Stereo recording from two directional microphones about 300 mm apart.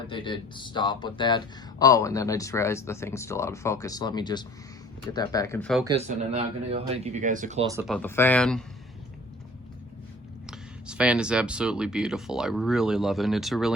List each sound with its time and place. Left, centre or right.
0.1 s speech: centre
6.1 s speech: centre
7.7 s speech: centre
7.9 s speech: centre
10.8 s speech: centre